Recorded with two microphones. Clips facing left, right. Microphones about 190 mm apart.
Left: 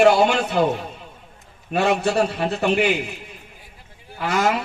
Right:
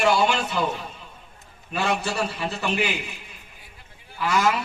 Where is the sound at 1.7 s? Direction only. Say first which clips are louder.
Left 6 dB; 60° left (ahead or behind).